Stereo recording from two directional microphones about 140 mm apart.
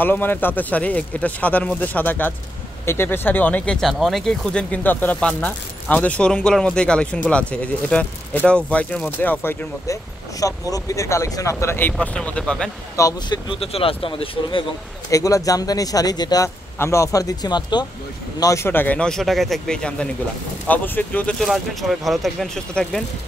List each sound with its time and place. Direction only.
0.0 s speech: 15° left (ahead or behind)
12.9 s speech: 25° left (ahead or behind)
13.5 s speech: 45° left (ahead or behind)
15.0 s speech: 25° left (ahead or behind)
18.4 s speech: 20° left (ahead or behind); by 23.0 s 5° left (ahead or behind)